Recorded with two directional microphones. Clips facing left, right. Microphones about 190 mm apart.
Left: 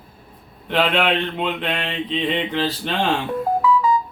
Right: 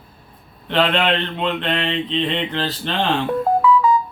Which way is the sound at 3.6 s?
55° right (ahead or behind).